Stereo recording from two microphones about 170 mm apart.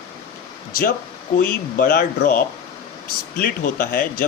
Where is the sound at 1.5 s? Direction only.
60° left (ahead or behind).